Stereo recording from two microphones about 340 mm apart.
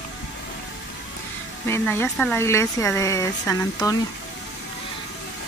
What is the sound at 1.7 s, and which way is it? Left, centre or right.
Speech, centre.